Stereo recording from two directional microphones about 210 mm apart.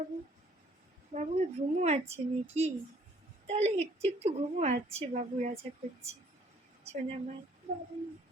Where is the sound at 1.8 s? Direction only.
30° right (ahead or behind).